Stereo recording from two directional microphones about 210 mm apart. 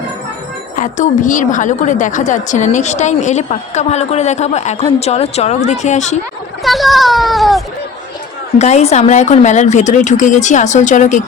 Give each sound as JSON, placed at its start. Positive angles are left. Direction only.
{"t": 0.8, "sound": "a woman's voice", "side_deg": 35}
{"t": 6.6, "sound": "a child's voice", "side_deg": 0}
{"t": 8.5, "sound": "a woman's voice", "side_deg": 30}